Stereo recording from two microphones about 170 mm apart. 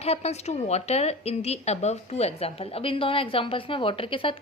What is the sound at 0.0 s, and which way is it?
A woman's voice, 40° left (ahead or behind).